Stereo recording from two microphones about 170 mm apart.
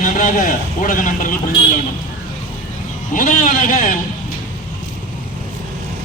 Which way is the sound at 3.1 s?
50° left (ahead or behind).